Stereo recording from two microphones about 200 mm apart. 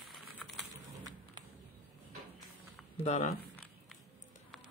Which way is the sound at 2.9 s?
35° left (ahead or behind).